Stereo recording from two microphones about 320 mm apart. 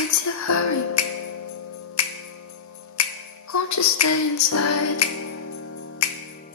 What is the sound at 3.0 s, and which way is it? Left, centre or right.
Music, left.